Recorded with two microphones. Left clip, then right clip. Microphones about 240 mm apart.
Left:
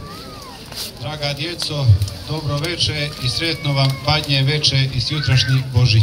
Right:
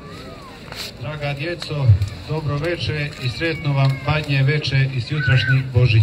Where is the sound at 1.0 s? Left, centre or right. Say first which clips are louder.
Left 2 dB; left.